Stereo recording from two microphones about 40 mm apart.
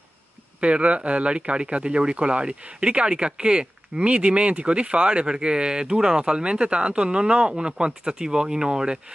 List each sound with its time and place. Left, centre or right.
0.6 s speech: right